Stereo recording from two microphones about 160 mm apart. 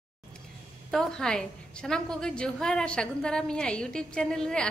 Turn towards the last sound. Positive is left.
turn(degrees=5)  # may be behind; listen again after turning